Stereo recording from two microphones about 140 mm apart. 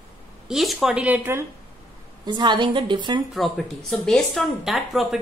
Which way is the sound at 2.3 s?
35° right (ahead or behind).